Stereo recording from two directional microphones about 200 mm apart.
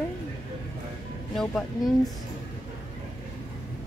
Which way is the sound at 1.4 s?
Centre (ahead or behind).